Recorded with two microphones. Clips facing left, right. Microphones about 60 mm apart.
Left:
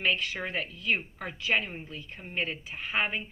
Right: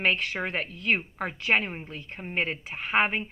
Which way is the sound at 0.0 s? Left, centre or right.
Right.